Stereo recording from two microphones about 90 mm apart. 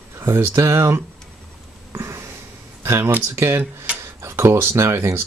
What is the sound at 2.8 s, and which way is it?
Speech, 25° right (ahead or behind).